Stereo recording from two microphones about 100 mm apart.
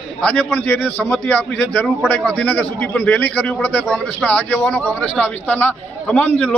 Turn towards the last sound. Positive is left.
turn(degrees=15)  # may be behind; listen again after turning